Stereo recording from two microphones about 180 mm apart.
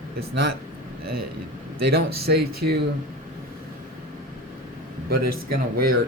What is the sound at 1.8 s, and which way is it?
Speech, 60° right (ahead or behind).